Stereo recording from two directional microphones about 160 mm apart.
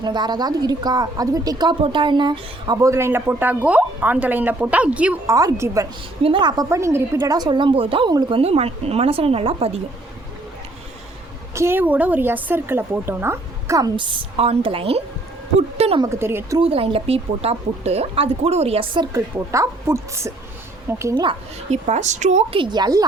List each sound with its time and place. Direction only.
0.0 s a woman's voice: 30° right (ahead or behind); by 5.3 s 10° right (ahead or behind)
5.3 s a woman's voice: 20° right (ahead or behind)
6.2 s speech: 30° right (ahead or behind)
6.7 s a woman's voice: 15° right (ahead or behind); by 9.8 s 40° right (ahead or behind)
11.5 s a woman's voice: 15° right (ahead or behind); by 16.0 s 35° right (ahead or behind)
16.0 s a woman's voice: 15° right (ahead or behind)
16.6 s speech: 35° right (ahead or behind)
19.1 s a woman's voice: 20° right (ahead or behind)
21.7 s a woman's voice: 45° right (ahead or behind)
22.5 s a woman's voice: 30° right (ahead or behind)